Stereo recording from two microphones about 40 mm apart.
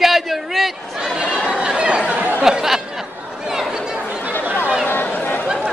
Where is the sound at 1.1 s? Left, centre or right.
Right.